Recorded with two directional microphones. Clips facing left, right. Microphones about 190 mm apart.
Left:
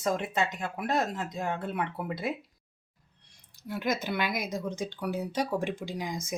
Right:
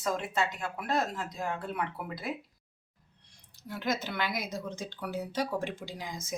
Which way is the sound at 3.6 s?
10° left (ahead or behind).